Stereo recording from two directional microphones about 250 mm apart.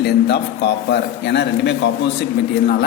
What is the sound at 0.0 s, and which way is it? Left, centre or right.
A man's voice, left.